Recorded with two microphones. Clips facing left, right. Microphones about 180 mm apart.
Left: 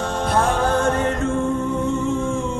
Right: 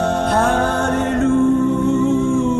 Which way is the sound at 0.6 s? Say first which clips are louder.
Right 1 dB; 75° right (ahead or behind).